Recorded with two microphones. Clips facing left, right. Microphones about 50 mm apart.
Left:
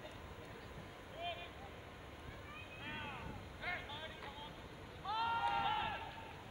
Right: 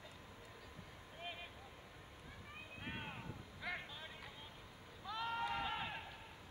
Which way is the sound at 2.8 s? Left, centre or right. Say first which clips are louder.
Left 1 dB; centre.